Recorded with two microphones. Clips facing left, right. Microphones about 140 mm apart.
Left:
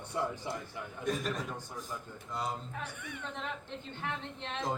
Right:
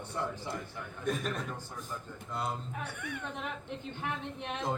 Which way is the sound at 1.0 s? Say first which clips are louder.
Even; centre (ahead or behind).